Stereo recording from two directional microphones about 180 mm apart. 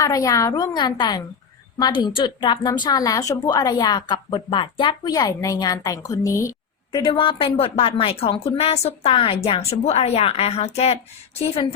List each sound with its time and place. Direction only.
0.0 s a woman's voice: 20° left (ahead or behind)